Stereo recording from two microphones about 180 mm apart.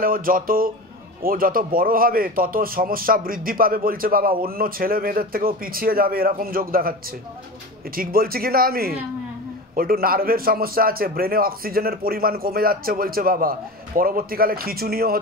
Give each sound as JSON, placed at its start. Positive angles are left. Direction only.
{"t": 0.0, "sound": "a man's voice", "side_deg": -50}